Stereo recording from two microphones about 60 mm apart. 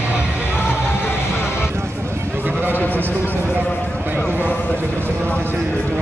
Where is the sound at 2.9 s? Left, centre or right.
Right.